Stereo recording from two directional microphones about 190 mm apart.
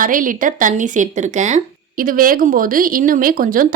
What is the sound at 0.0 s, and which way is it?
Speech, 45° right (ahead or behind).